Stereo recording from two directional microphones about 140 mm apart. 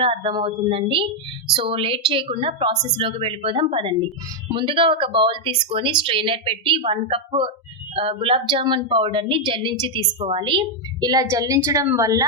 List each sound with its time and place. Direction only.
0.0 s a woman's voice: 40° right (ahead or behind); by 12.2 s 25° right (ahead or behind)